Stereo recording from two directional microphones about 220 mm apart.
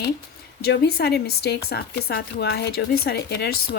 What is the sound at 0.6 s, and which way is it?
Speech, 45° left (ahead or behind).